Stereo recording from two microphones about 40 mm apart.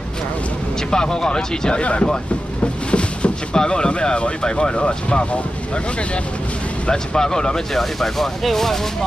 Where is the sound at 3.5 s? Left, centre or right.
Left.